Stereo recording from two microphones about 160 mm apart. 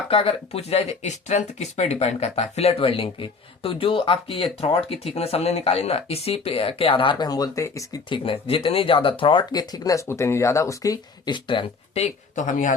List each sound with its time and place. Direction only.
0.1 s speech: 35° left (ahead or behind)
8.2 s speech: 35° left (ahead or behind); by 12.7 s 50° left (ahead or behind)